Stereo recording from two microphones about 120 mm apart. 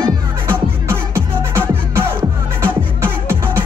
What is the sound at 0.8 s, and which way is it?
Music, 20° right (ahead or behind).